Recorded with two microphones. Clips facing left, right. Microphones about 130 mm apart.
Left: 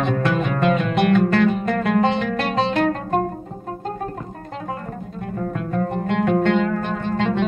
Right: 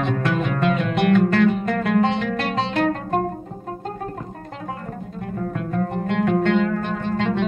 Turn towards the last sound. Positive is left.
turn(degrees=20)  # may be behind; listen again after turning